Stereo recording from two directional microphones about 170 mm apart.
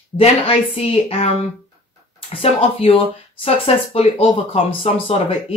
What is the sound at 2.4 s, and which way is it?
Speech, 35° left (ahead or behind).